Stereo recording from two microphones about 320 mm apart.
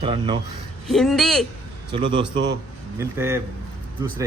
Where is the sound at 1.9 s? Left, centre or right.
Centre.